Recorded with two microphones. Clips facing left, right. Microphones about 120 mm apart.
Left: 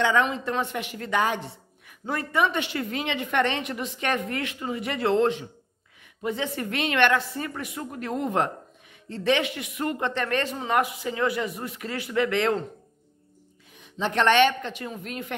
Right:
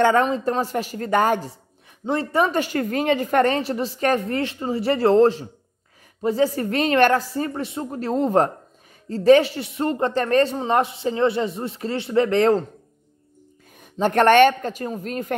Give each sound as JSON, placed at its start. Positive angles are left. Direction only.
{"t": 0.0, "sound": "a woman's voice", "side_deg": -40}
{"t": 13.7, "sound": "speech", "side_deg": -45}